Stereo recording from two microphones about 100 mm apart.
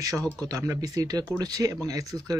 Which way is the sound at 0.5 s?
30° right (ahead or behind).